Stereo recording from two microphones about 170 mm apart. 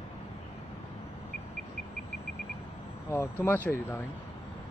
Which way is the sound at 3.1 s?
15° left (ahead or behind).